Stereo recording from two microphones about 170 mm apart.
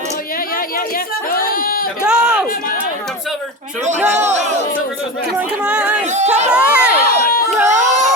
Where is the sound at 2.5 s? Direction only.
55° left (ahead or behind).